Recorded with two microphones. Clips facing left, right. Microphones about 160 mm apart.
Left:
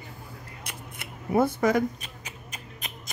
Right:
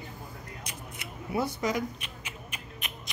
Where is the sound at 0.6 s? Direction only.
55° left (ahead or behind).